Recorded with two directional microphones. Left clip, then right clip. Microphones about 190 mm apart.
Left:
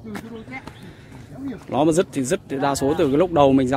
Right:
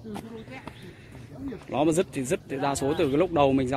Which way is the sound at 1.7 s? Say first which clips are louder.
Left 6 dB; 15° left (ahead or behind).